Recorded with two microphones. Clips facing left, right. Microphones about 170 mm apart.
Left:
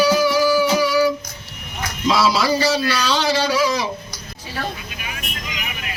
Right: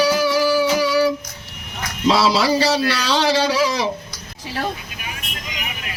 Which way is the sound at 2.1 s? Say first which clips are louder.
Right 1 dB; 30° right (ahead or behind).